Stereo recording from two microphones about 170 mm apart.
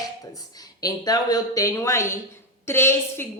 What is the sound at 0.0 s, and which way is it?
A woman's voice, 20° left (ahead or behind).